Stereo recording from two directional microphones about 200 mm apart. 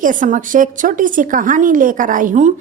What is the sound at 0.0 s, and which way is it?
Speech, 40° right (ahead or behind).